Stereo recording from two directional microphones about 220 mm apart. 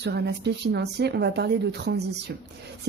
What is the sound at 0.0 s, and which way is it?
Speech, 50° right (ahead or behind).